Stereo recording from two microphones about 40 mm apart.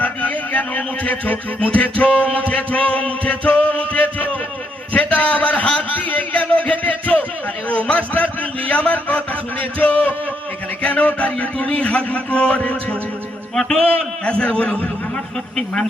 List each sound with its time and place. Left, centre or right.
0.0 s music: left
1.6 s a man's voice: left
5.9 s a man's voice: left
6.3 s a man's voice: left
14.3 s speech: left
15.5 s speech: centre